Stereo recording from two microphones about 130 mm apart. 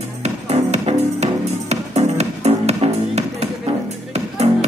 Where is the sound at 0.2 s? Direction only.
55° right (ahead or behind).